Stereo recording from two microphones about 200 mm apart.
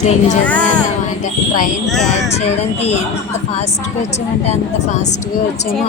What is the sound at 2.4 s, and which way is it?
Speech, 30° left (ahead or behind).